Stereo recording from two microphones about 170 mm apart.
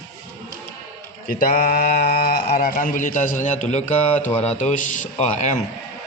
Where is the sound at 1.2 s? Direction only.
60° left (ahead or behind).